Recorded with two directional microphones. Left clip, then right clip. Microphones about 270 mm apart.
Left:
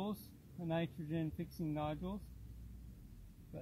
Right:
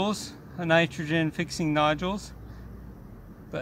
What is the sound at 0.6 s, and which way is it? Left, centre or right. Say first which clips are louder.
Speech: right 18 dB; centre.